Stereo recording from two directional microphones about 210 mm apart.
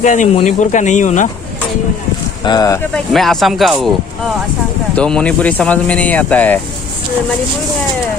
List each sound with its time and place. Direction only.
0.0 s speech: 35° left (ahead or behind)
2.4 s speech: 20° left (ahead or behind)
2.9 s speech: centre (ahead or behind)
4.9 s speech: 5° left (ahead or behind)